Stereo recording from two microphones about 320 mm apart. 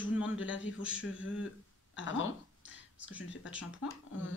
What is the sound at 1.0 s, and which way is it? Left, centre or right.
Speech, left.